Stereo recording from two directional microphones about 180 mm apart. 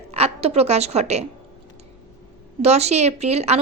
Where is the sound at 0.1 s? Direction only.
35° right (ahead or behind).